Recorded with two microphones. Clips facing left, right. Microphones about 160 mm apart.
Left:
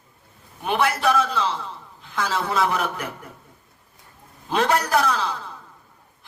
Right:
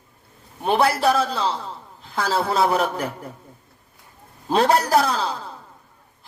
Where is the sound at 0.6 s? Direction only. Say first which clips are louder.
Right 3 dB; 35° right (ahead or behind).